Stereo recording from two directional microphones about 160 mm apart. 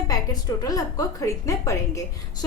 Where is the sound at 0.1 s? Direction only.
25° left (ahead or behind).